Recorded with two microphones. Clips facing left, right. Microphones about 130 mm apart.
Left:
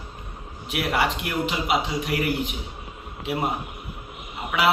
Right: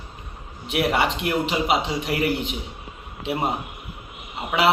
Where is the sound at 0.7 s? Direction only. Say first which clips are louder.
Right 3 dB; 25° right (ahead or behind).